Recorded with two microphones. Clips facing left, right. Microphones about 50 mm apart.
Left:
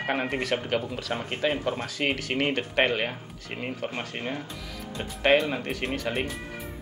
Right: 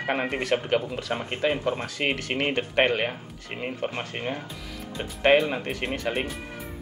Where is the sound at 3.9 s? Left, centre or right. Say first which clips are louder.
Right 1 dB; right; by 6.4 s centre.